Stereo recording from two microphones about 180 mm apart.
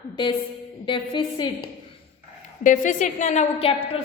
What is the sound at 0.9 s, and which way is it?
Speech, 25° left (ahead or behind).